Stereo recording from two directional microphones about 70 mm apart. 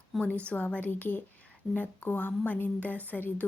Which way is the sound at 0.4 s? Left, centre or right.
Left.